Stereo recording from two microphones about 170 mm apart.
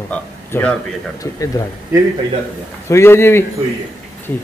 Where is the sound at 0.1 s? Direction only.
10° left (ahead or behind).